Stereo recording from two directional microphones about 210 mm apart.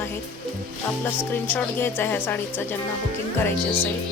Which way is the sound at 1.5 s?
10° left (ahead or behind).